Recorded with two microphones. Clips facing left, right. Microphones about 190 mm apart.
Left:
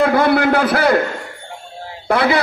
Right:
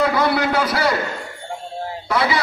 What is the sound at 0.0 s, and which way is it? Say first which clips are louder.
Speech: left 4 dB; 55° left (ahead or behind).